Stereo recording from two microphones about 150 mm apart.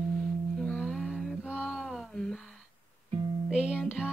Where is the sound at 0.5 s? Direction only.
Centre (ahead or behind).